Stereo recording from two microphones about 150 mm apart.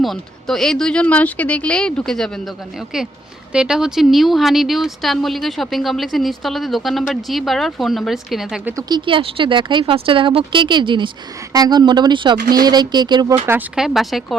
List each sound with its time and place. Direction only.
0.0 s speech: centre (ahead or behind)
3.5 s speech: 5° right (ahead or behind)
8.9 s speech: 35° right (ahead or behind)
13.7 s speech: centre (ahead or behind)